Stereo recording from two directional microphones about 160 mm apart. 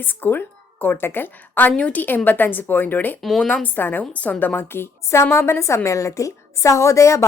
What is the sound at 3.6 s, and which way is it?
A woman's voice, 10° left (ahead or behind).